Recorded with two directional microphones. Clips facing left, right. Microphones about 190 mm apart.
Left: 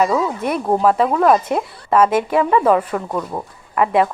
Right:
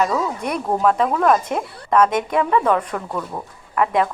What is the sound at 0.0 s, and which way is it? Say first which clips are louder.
Speech: left 3 dB; 5° left (ahead or behind).